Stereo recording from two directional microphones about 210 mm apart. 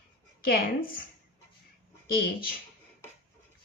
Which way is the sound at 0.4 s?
45° left (ahead or behind).